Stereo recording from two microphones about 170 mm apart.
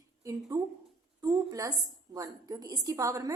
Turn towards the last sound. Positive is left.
turn(degrees=-20)  # may be behind; listen again after turning